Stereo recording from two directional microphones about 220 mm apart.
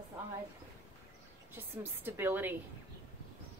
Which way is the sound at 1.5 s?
10° right (ahead or behind).